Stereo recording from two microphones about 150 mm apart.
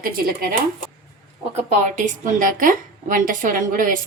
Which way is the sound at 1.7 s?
55° right (ahead or behind).